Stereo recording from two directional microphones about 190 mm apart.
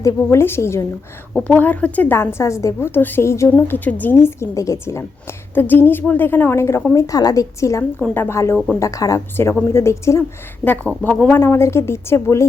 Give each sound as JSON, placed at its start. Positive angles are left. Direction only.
{"t": 0.0, "sound": "a woman's voice", "side_deg": 15}
{"t": 8.5, "sound": "speech", "side_deg": 0}
{"t": 8.8, "sound": "a woman's voice", "side_deg": 15}